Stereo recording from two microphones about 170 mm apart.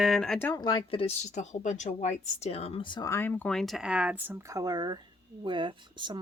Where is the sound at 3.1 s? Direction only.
10° left (ahead or behind).